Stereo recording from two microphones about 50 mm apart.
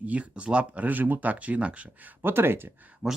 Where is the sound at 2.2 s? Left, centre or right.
Right.